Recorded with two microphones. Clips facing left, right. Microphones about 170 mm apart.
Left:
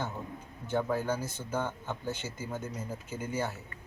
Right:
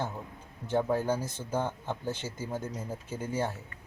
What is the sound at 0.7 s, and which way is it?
Speech, 30° right (ahead or behind).